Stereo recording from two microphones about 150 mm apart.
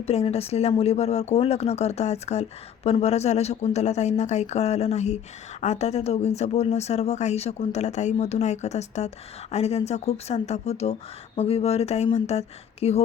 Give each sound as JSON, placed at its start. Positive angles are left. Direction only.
{"t": 0.0, "sound": "speech", "side_deg": 45}